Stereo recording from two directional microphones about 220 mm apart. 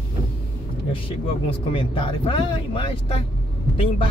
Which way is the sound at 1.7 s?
20° left (ahead or behind).